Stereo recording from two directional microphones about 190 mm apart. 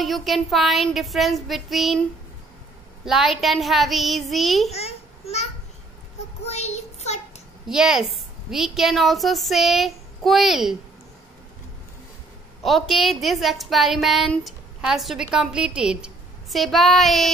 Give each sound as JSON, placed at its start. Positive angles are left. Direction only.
{"t": 0.0, "sound": "a woman's voice", "side_deg": 0}
{"t": 3.1, "sound": "a woman's voice", "side_deg": 0}
{"t": 4.6, "sound": "a child's voice", "side_deg": 35}
{"t": 6.4, "sound": "child singing", "side_deg": 35}
{"t": 7.6, "sound": "a woman's voice", "side_deg": -5}
{"t": 12.6, "sound": "a woman's voice", "side_deg": 0}